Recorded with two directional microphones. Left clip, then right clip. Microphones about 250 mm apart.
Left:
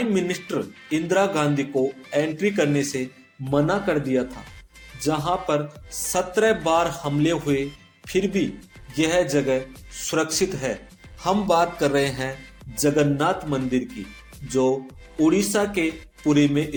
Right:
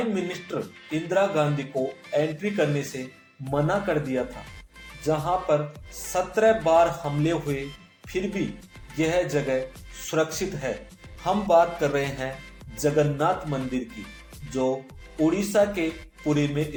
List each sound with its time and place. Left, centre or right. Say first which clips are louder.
0.1 s speech: left 5 dB; left